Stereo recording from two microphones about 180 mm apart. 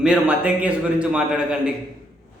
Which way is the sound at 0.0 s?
5° right (ahead or behind).